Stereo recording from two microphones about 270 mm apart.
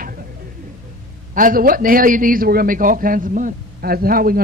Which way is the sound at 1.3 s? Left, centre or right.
Right.